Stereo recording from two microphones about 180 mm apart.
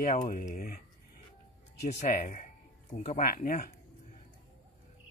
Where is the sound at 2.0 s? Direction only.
45° left (ahead or behind).